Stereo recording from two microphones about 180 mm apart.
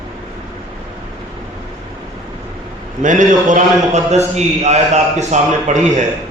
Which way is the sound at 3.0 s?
45° right (ahead or behind).